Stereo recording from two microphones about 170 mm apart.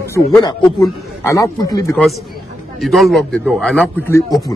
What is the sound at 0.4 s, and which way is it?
A man's voice, 25° left (ahead or behind).